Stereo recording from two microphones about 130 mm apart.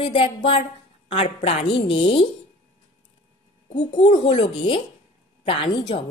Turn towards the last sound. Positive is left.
turn(degrees=45)  # may be behind; listen again after turning